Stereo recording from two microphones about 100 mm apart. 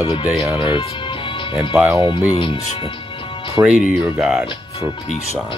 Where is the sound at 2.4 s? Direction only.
60° left (ahead or behind).